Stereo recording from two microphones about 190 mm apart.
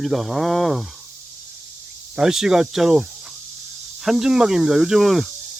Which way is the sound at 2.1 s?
5° right (ahead or behind).